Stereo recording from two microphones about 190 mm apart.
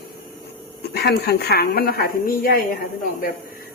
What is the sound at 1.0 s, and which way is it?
A woman's voice, 55° left (ahead or behind).